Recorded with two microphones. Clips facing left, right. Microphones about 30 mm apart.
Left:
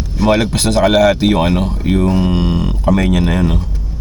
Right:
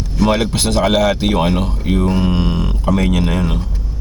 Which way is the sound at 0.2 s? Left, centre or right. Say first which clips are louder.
Left 2 dB; centre.